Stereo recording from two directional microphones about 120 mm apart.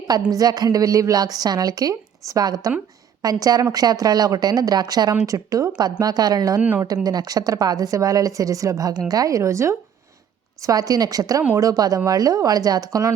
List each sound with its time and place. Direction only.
0.3 s a woman's voice: 30° right (ahead or behind)